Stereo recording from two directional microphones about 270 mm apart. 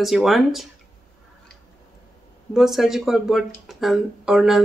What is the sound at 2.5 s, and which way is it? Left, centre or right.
Speech, centre.